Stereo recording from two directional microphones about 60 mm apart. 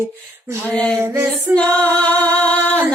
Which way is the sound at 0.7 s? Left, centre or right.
Centre.